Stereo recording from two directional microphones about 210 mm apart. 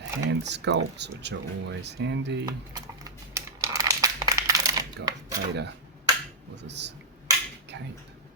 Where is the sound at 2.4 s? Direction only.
20° right (ahead or behind).